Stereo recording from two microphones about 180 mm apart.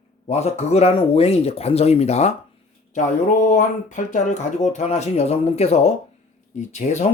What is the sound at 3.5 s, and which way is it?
Speech, 45° left (ahead or behind).